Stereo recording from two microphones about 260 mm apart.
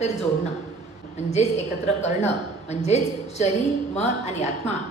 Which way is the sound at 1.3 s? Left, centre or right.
Left.